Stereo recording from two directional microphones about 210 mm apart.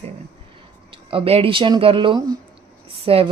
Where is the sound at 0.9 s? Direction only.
25° right (ahead or behind).